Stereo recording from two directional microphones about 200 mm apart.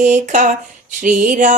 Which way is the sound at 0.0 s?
40° right (ahead or behind).